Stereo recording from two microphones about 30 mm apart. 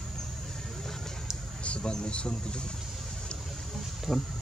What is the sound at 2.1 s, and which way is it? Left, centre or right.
Speech, left.